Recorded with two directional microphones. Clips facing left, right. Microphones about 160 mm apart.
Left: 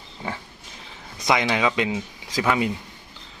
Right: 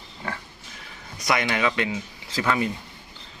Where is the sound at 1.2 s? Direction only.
20° left (ahead or behind).